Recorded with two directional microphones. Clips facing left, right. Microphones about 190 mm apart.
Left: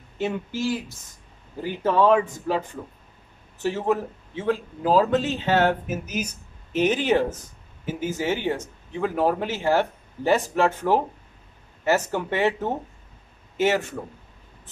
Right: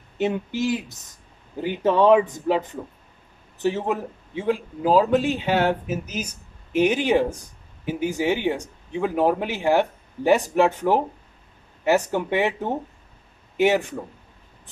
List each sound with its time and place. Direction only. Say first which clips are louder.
0.2 s speech: right 3 dB; 20° right (ahead or behind)